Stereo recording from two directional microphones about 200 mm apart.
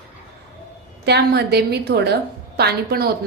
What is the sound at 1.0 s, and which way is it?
A woman's voice, 55° right (ahead or behind).